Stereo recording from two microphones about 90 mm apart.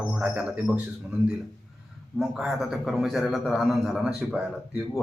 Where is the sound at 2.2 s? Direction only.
5° right (ahead or behind).